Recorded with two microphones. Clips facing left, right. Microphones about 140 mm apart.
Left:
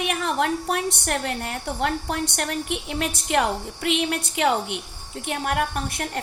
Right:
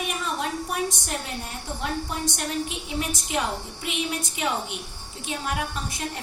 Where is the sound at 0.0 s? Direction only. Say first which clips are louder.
Left 5 dB; 65° left (ahead or behind).